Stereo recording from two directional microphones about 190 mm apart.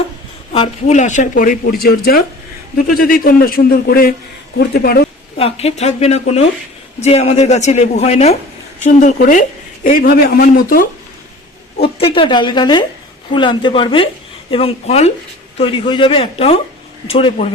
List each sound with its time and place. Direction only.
0.5 s speech: 35° left (ahead or behind); by 5.0 s 55° left (ahead or behind)
5.4 s speech: 30° left (ahead or behind); by 10.8 s 50° left (ahead or behind)
11.8 s speech: 30° left (ahead or behind)